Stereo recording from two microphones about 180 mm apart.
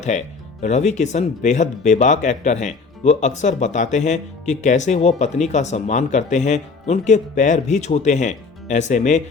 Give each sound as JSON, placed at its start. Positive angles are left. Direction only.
{"t": 0.0, "sound": "speech", "side_deg": 40}